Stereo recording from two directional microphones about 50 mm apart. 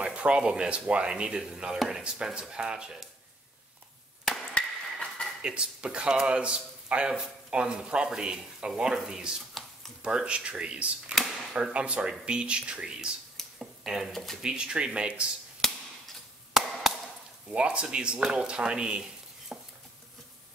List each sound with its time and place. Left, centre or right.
0.0 s speech: right
4.6 s chop: left
5.4 s speech: centre
9.5 s computer keyboard: centre
10.0 s speech: centre
13.4 s a sound: centre
13.8 s speech: centre
14.4 s speech: centre
15.6 s a sound: centre
17.5 s speech: right
19.5 s a sound: centre